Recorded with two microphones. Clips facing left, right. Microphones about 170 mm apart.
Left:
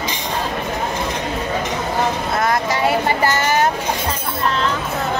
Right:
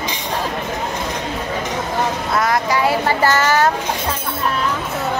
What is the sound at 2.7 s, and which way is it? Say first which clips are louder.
Speech: right 1 dB; 25° left (ahead or behind).